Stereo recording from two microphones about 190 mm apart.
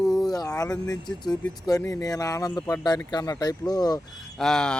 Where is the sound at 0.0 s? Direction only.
Centre (ahead or behind).